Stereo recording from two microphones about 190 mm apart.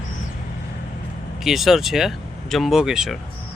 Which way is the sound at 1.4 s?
Centre (ahead or behind).